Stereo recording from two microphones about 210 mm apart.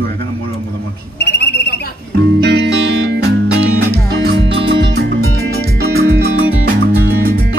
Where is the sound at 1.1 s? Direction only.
55° left (ahead or behind).